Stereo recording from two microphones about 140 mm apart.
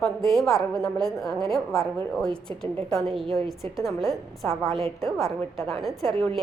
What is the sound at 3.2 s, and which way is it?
Speech, 40° right (ahead or behind).